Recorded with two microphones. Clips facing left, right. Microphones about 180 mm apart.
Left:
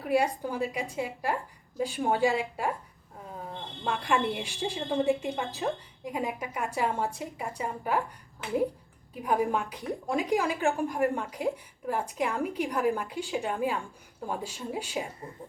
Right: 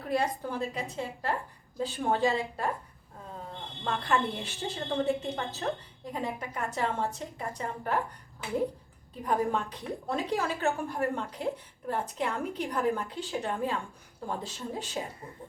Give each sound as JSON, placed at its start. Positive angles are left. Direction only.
{"t": 0.0, "sound": "a woman's voice", "side_deg": 10}
{"t": 3.8, "sound": "a woman's voice", "side_deg": 10}
{"t": 9.1, "sound": "a woman's voice", "side_deg": 10}